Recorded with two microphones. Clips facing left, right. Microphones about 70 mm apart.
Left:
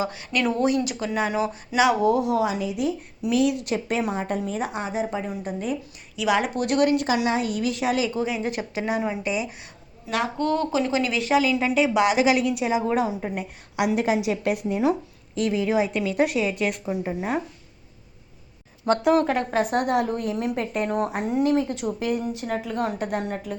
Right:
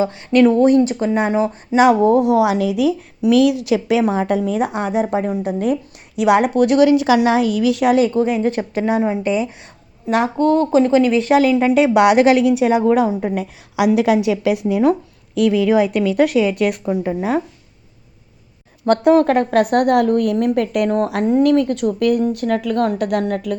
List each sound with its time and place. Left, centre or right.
0.0 s speech: right
1.8 s a woman's voice: right
11.3 s a woman's voice: right
13.3 s a woman's voice: right
15.4 s a woman's voice: right
19.1 s a woman's voice: right